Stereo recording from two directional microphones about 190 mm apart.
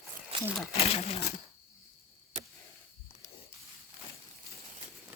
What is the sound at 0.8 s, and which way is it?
Speech, 30° left (ahead or behind).